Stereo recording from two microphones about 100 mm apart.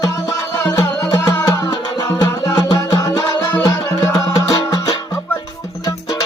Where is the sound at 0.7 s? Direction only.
35° left (ahead or behind).